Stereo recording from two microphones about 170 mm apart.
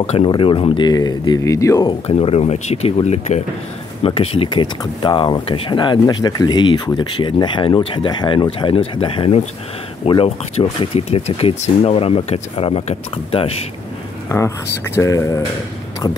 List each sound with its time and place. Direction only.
0.0 s speech: 35° left (ahead or behind)
1.9 s speech: 35° left (ahead or behind)
15.0 s speech: 20° left (ahead or behind)